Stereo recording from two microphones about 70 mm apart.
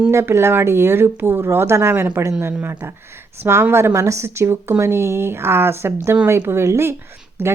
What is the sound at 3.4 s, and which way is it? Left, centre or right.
Speech, right.